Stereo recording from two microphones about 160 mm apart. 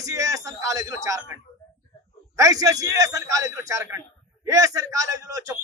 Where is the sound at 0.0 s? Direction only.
20° right (ahead or behind).